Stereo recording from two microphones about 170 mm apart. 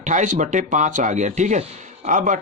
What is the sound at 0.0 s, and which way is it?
Speech, 45° right (ahead or behind).